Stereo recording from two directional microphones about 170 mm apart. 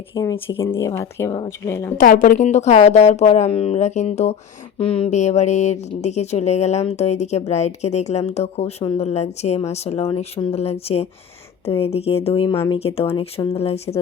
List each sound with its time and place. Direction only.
0.1 s speech: 20° left (ahead or behind)
2.0 s speech: 55° left (ahead or behind)
4.8 s a sound: 35° left (ahead or behind)
5.9 s speech: 40° left (ahead or behind)